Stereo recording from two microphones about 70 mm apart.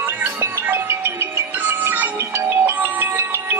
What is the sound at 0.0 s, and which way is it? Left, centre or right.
Music, right.